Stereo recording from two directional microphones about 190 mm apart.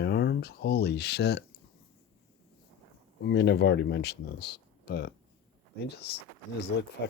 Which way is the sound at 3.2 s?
65° left (ahead or behind).